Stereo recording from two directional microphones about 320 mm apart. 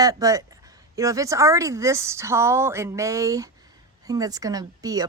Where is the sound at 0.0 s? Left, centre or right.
Centre.